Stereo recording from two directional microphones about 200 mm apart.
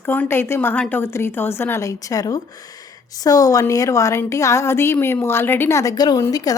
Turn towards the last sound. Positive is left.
turn(degrees=15)  # may be behind; listen again after turning